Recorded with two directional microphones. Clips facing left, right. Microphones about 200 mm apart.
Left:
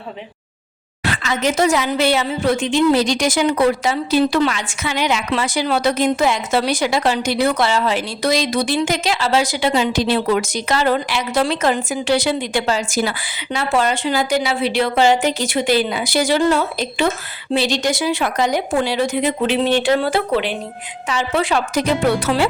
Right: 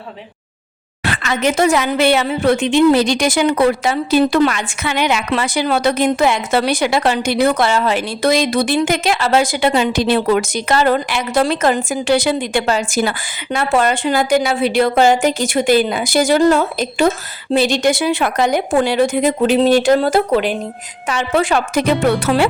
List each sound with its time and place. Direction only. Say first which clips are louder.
1.0 s a woman's voice: right 2 dB; 60° right (ahead or behind)